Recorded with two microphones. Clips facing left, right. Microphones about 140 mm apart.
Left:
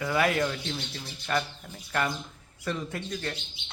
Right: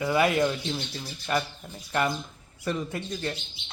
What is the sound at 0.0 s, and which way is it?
Speech, 15° right (ahead or behind).